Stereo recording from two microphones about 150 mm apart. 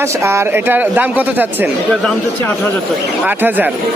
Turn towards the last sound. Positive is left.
turn(degrees=-10)  # may be behind; listen again after turning